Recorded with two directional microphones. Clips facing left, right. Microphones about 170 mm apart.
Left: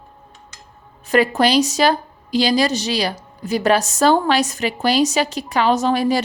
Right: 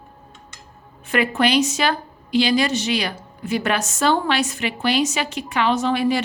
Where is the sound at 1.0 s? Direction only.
40° left (ahead or behind).